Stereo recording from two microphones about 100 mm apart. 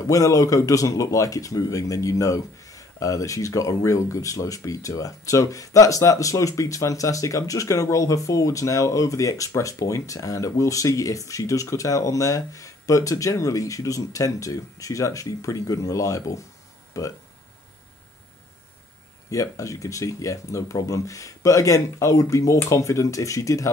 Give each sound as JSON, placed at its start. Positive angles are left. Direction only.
{"t": 0.1, "sound": "speech", "side_deg": 35}
{"t": 19.3, "sound": "speech", "side_deg": 35}